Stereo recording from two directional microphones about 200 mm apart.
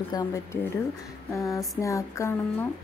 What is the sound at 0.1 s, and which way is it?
A woman's voice, 15° left (ahead or behind).